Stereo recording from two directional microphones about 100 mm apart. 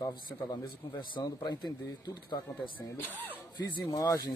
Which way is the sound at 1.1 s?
40° left (ahead or behind).